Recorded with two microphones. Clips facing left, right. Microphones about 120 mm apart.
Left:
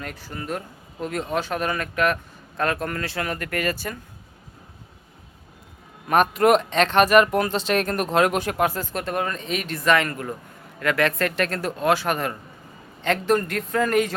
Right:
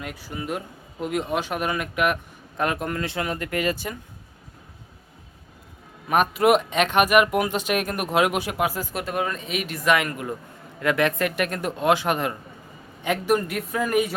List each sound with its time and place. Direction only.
0.0 s a man's voice: 10° right (ahead or behind)
6.1 s a man's voice: 5° right (ahead or behind)